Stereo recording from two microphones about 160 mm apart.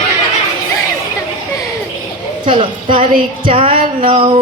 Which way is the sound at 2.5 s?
35° right (ahead or behind).